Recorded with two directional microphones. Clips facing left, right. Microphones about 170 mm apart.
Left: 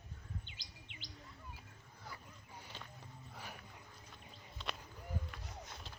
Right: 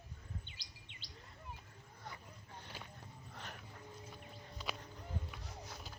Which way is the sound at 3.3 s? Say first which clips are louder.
Even; 5° left (ahead or behind).